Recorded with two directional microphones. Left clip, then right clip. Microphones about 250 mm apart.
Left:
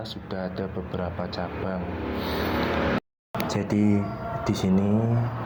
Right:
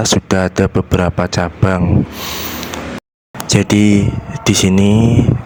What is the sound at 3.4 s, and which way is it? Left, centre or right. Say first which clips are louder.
Speech: right 13 dB; right.